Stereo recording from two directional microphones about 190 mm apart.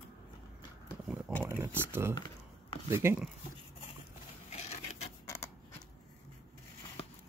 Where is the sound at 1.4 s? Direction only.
10° right (ahead or behind).